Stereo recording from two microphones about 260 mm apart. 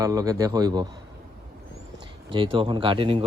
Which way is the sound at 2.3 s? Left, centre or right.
Centre.